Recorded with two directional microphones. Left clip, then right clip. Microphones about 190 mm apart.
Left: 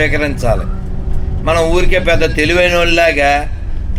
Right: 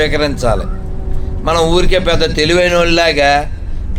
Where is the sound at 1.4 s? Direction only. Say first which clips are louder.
Even; 30° right (ahead or behind).